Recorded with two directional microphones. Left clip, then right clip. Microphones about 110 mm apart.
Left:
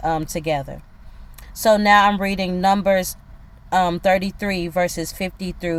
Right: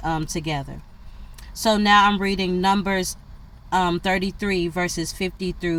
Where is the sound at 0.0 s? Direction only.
60° left (ahead or behind).